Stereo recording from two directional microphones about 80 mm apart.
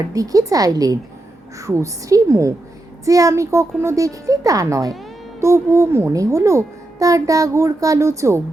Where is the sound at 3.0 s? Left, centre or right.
Right.